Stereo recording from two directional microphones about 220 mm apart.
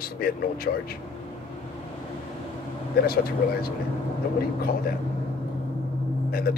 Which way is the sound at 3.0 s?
45° left (ahead or behind).